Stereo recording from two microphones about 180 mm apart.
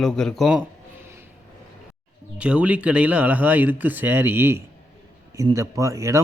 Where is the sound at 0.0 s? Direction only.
5° left (ahead or behind).